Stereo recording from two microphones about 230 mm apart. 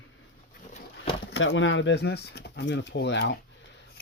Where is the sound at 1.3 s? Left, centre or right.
Left.